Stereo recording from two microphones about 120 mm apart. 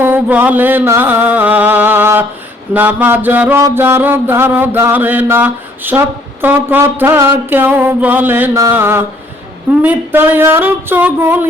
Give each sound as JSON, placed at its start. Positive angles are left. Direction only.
{"t": 0.0, "sound": "music", "side_deg": -15}
{"t": 2.7, "sound": "mantra", "side_deg": -15}
{"t": 8.7, "sound": "a sound", "side_deg": -20}
{"t": 9.6, "sound": "mantra", "side_deg": -15}